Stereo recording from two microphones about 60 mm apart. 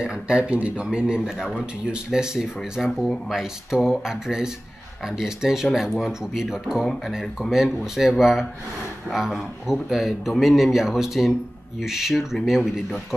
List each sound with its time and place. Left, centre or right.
0.0 s speech: centre
6.8 s a man's voice: centre